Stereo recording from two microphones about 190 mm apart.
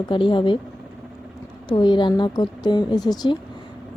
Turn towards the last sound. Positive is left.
turn(degrees=20)  # may be behind; listen again after turning